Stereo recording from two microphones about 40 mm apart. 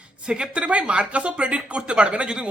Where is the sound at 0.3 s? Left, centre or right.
Right.